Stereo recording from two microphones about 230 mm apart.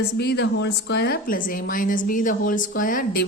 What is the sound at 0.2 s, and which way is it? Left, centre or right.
A woman's voice, left.